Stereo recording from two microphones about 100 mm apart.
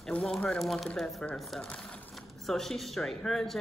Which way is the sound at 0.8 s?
Centre (ahead or behind).